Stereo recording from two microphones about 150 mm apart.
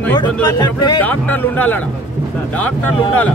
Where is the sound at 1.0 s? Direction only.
10° left (ahead or behind).